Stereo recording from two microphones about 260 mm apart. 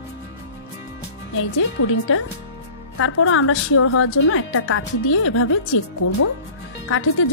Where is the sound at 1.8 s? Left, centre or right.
Left.